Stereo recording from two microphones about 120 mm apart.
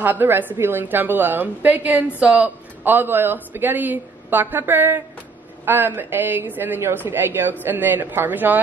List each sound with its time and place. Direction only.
0.0 s a woman's voice: 15° right (ahead or behind)